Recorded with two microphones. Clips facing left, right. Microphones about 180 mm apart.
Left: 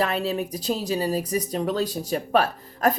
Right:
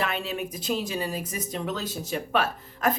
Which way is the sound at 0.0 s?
40° left (ahead or behind).